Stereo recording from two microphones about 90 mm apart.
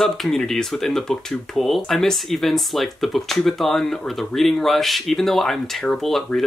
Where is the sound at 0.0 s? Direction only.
5° left (ahead or behind).